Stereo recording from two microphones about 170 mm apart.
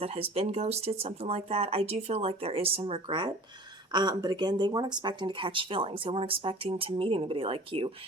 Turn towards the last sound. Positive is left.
turn(degrees=-30)  # may be behind; listen again after turning